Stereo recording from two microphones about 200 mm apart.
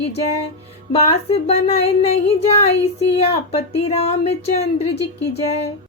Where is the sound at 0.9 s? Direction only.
30° left (ahead or behind).